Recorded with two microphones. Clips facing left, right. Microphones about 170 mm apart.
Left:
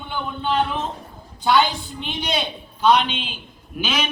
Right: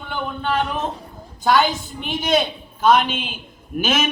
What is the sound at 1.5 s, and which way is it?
A man's voice, 45° right (ahead or behind).